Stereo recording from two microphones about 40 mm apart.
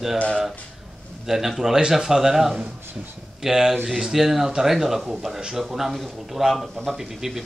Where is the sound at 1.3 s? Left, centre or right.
Centre.